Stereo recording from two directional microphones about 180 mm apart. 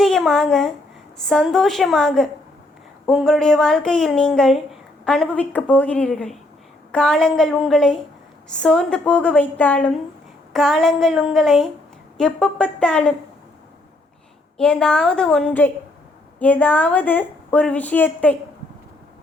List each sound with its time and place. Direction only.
0.0 s a woman's voice: centre (ahead or behind)
14.6 s a woman's voice: 5° left (ahead or behind)